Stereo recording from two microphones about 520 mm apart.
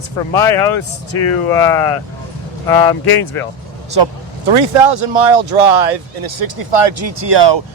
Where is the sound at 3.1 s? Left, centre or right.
Left.